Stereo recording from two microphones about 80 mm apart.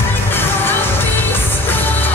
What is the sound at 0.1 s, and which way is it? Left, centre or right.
Music, left.